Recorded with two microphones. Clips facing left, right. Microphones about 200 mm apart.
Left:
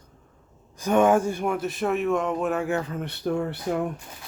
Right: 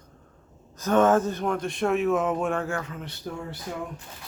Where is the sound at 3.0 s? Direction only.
65° left (ahead or behind).